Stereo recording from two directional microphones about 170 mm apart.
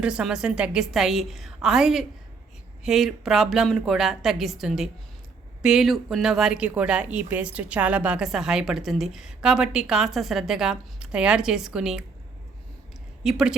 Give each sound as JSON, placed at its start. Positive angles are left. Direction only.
{"t": 0.0, "sound": "speech", "side_deg": -5}
{"t": 13.2, "sound": "speech", "side_deg": -5}